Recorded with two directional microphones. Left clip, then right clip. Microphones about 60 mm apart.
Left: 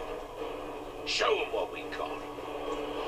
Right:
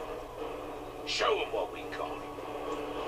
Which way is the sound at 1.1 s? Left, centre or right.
Left.